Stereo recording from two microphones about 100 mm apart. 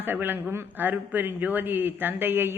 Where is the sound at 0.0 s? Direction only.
20° right (ahead or behind).